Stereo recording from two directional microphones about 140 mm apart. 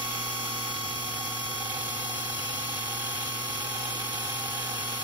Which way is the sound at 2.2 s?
15° right (ahead or behind).